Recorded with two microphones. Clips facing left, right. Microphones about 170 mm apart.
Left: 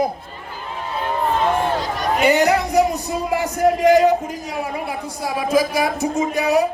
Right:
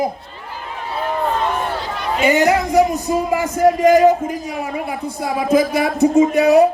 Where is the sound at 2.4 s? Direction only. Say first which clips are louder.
Right 2 dB; 45° right (ahead or behind).